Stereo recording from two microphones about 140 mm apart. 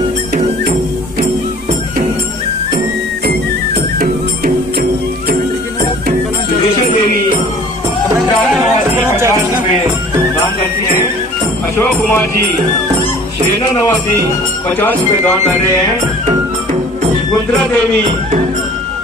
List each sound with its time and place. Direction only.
9.0 s music: 20° right (ahead or behind)
11.7 s music: 15° left (ahead or behind)
14.8 s speech: 15° left (ahead or behind)